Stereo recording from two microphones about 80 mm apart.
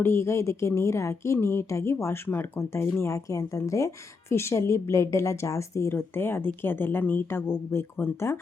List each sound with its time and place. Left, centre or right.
0.0 s a woman's voice: left
3.2 s a woman's voice: left